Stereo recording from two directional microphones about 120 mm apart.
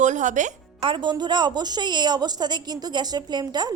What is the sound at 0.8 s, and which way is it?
A woman's voice, 40° right (ahead or behind).